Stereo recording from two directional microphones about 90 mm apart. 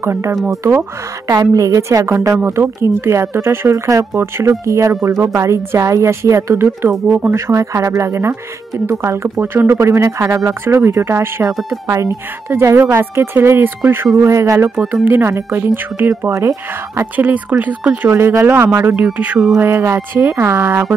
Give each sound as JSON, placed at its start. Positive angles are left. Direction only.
{"t": 0.0, "sound": "speech", "side_deg": -30}
{"t": 1.2, "sound": "speech", "side_deg": -45}
{"t": 2.3, "sound": "speech", "side_deg": -25}
{"t": 16.3, "sound": "speech", "side_deg": -35}
{"t": 17.2, "sound": "speech", "side_deg": -20}
{"t": 18.1, "sound": "speech", "side_deg": -30}
{"t": 19.6, "sound": "speech", "side_deg": -30}